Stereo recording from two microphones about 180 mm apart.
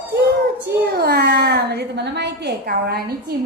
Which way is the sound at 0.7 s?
65° right (ahead or behind).